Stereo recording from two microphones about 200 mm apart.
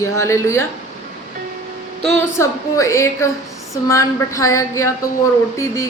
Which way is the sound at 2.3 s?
15° left (ahead or behind).